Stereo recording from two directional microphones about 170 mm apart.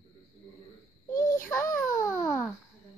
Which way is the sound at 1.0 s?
15° left (ahead or behind).